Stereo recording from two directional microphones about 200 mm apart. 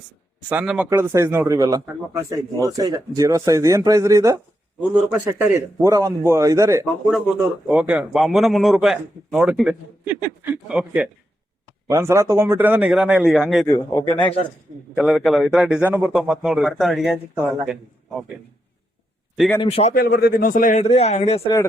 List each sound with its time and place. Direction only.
0.5 s speech: 5° right (ahead or behind)
7.1 s speech: centre (ahead or behind)
13.7 s a man's voice: 15° left (ahead or behind)
14.9 s speech: centre (ahead or behind)
19.5 s speech: 30° left (ahead or behind)
19.9 s speech: 50° left (ahead or behind); by 21.6 s 30° left (ahead or behind)